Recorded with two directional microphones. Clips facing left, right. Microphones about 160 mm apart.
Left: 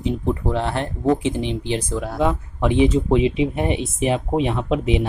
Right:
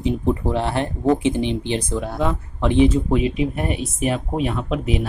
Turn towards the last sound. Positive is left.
turn(degrees=20)  # may be behind; listen again after turning